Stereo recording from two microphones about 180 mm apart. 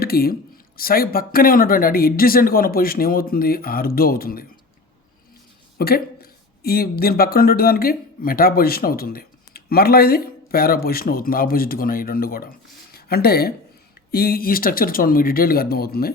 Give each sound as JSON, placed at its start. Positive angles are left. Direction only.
{"t": 0.0, "sound": "speech", "side_deg": 55}
{"t": 5.7, "sound": "speech", "side_deg": 60}
{"t": 12.9, "sound": "a sound", "side_deg": 60}
{"t": 14.1, "sound": "speech", "side_deg": 55}